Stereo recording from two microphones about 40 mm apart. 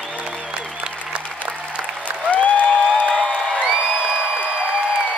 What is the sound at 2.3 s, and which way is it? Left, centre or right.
Applause, left.